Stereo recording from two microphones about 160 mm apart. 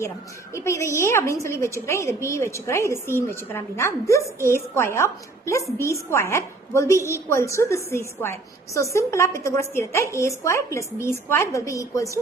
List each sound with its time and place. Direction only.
0.5 s a woman's voice: 15° left (ahead or behind)